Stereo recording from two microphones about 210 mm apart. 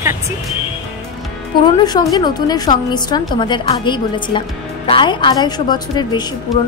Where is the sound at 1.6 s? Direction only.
20° left (ahead or behind).